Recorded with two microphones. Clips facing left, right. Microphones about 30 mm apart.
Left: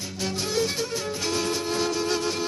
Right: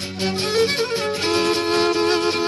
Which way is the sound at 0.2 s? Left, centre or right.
Right.